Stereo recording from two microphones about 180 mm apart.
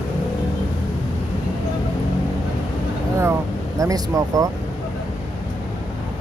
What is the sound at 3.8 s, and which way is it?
Speech, 20° right (ahead or behind).